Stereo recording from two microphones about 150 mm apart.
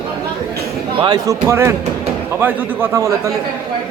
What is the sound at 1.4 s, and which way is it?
A man's voice, 15° right (ahead or behind).